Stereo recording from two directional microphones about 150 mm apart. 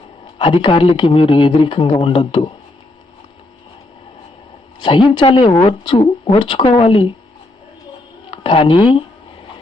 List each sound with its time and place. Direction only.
0.3 s speech: 35° left (ahead or behind)
4.8 s speech: 35° left (ahead or behind)
8.3 s speech: 35° left (ahead or behind)